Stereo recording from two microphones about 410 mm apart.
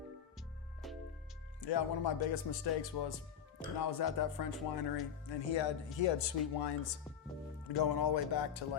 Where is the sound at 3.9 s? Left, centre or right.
Left.